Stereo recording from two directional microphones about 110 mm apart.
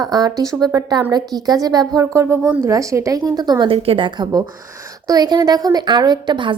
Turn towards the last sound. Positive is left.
turn(degrees=-45)  # may be behind; listen again after turning